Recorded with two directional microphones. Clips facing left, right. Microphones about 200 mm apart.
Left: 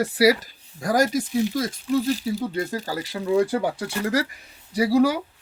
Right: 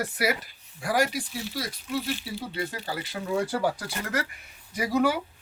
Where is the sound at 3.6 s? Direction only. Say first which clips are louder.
Left 2 dB; 20° left (ahead or behind).